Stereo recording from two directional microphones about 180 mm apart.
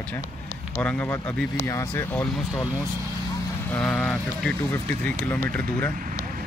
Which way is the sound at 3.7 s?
5° left (ahead or behind).